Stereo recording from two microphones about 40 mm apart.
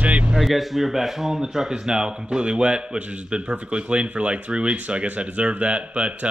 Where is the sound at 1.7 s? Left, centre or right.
Centre.